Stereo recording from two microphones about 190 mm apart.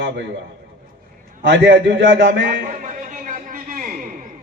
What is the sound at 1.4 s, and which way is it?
A man's voice, 65° right (ahead or behind).